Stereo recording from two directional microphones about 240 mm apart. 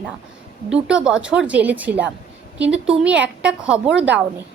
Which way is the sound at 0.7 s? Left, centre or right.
Centre.